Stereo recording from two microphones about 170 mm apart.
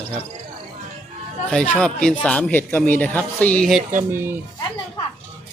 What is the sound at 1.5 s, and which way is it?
Speech, 5° left (ahead or behind).